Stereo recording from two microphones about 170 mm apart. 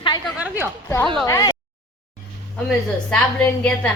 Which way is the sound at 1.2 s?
20° left (ahead or behind).